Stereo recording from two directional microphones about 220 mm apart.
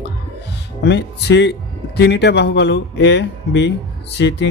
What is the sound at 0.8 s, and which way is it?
Speech, 50° left (ahead or behind).